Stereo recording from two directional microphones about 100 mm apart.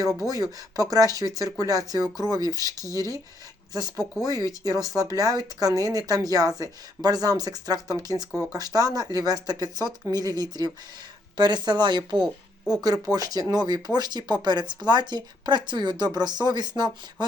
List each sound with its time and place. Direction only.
0.2 s speech: 35° right (ahead or behind)
12.2 s a sound: 10° right (ahead or behind)
13.1 s speech: 40° right (ahead or behind)